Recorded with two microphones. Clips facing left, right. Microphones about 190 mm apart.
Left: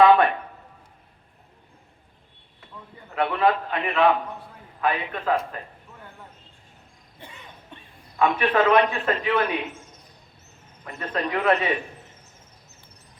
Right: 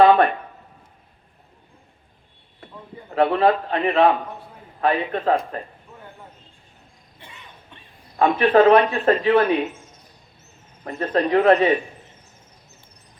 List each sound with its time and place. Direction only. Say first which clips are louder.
0.0 s a sound: right 2 dB; 40° right (ahead or behind)
3.2 s a man's voice: right 4 dB; 35° right (ahead or behind)
8.1 s a man's voice: right 5 dB; 40° right (ahead or behind)
10.8 s a man's voice: right 7 dB; 40° right (ahead or behind)